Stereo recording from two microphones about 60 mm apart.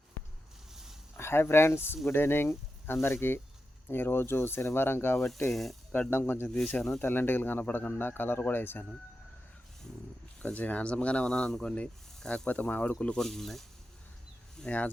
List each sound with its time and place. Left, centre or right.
1.1 s speech: left
5.5 s speech: centre
5.9 s speech: left
10.4 s speech: left
13.2 s speech: centre